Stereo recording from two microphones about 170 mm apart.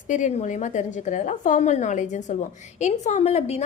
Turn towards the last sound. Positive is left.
turn(degrees=40)  # may be behind; listen again after turning